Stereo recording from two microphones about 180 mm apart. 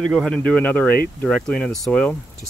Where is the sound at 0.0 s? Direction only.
Centre (ahead or behind).